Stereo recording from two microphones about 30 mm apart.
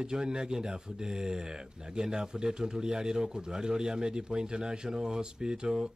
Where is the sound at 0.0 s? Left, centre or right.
Right.